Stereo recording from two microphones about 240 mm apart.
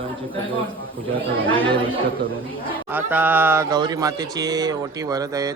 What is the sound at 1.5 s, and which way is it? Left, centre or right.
Speech, right.